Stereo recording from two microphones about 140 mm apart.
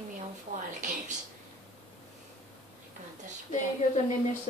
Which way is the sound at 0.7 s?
60° right (ahead or behind).